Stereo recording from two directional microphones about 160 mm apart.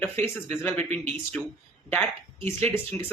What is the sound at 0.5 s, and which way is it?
Speech, 15° left (ahead or behind).